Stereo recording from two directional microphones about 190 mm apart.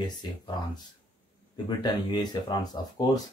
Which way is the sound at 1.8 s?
20° left (ahead or behind).